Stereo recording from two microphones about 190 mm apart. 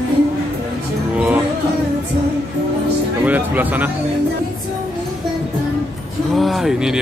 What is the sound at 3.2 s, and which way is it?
Speech, 10° right (ahead or behind).